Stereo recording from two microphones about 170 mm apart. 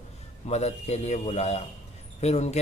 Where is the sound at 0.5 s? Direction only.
40° left (ahead or behind).